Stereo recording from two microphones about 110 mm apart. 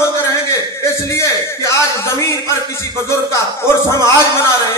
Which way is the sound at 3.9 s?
35° right (ahead or behind).